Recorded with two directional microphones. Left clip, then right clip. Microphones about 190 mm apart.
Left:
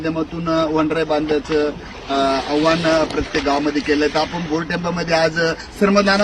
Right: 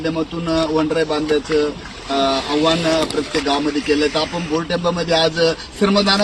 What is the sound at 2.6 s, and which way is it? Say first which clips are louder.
Speech: left 1 dB; 15° left (ahead or behind).